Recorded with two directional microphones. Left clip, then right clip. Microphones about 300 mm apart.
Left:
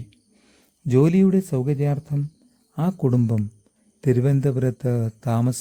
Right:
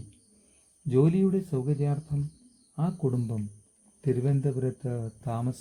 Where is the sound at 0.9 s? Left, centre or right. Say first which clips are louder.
Left 6 dB; left.